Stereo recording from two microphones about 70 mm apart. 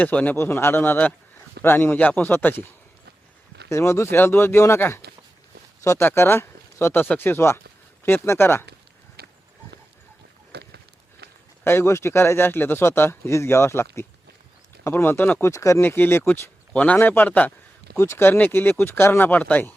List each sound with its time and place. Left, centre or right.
0.0 s speech: left
0.3 s speech: left
3.7 s speech: left
6.0 s speech: left
6.9 s speech: left
11.6 s speech: left
15.4 s speech: left
15.8 s speech: left
16.7 s a man's voice: centre
17.9 s speech: left